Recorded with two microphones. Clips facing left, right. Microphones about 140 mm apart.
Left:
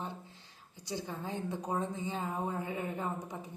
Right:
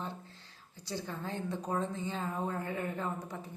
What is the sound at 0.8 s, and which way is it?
Speech, 15° left (ahead or behind).